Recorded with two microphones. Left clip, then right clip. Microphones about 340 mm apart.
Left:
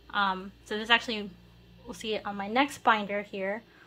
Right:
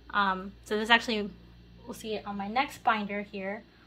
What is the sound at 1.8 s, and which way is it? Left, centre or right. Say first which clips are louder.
Speech: left 3 dB; centre.